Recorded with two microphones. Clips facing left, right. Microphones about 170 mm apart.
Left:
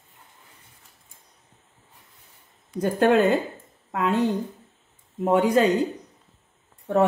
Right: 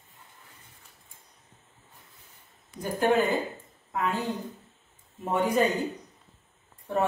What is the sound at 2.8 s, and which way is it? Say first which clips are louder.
Speech: left 6 dB; 80° left.